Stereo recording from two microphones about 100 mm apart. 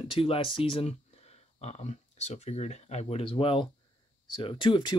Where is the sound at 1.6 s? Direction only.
90° left.